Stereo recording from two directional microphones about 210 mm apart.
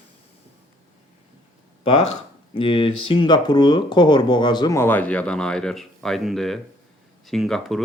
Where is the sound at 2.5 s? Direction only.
25° left (ahead or behind).